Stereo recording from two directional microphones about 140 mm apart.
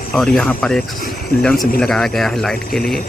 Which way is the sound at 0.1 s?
5° left (ahead or behind).